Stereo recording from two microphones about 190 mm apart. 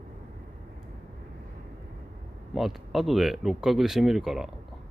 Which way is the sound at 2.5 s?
Centre (ahead or behind).